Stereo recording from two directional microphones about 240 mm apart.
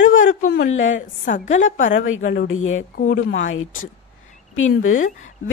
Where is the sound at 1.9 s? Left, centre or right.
Left.